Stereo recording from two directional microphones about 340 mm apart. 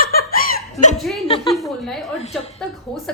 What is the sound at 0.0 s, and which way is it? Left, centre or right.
Laughter, left.